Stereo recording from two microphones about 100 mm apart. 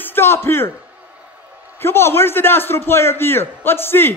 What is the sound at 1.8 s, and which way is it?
A man's voice, 25° left (ahead or behind).